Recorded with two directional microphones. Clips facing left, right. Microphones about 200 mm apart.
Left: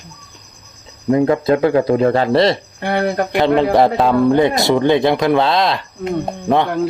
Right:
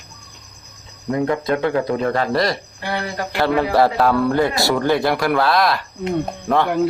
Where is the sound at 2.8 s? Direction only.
55° left (ahead or behind).